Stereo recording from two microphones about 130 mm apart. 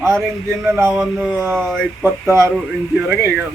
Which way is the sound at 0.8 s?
20° right (ahead or behind).